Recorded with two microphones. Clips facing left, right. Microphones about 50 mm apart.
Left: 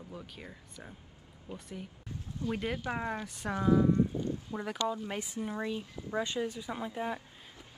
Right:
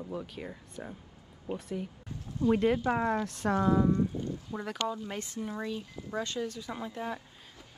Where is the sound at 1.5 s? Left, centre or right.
Right.